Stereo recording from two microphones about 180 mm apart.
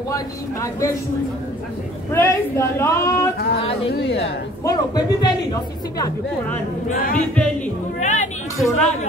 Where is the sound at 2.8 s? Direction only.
15° left (ahead or behind).